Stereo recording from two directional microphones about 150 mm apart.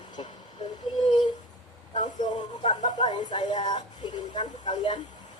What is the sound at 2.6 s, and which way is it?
Speech, 30° left (ahead or behind).